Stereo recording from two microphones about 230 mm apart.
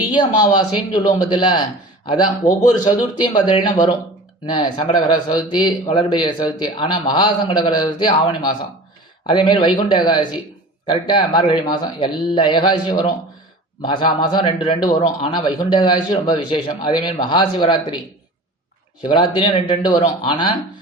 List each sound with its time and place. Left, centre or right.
0.1 s a man's voice: centre
19.0 s a man's voice: centre